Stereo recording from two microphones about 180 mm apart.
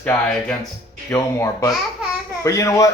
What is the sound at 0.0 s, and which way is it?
Speech, 10° left (ahead or behind).